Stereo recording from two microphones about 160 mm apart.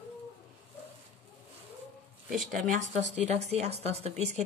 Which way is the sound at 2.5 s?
50° right (ahead or behind).